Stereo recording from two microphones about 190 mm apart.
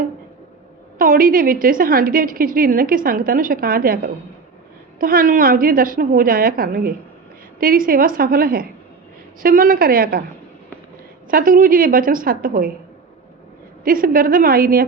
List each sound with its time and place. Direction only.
0.9 s a woman's voice: 50° right (ahead or behind)
11.3 s a woman's voice: 50° right (ahead or behind)
13.8 s a woman's voice: 50° right (ahead or behind)